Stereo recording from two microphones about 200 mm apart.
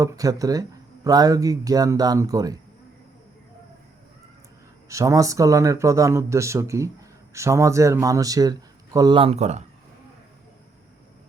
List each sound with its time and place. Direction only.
0.0 s speech: 20° right (ahead or behind)
4.9 s speech: 15° right (ahead or behind); by 9.6 s 35° right (ahead or behind)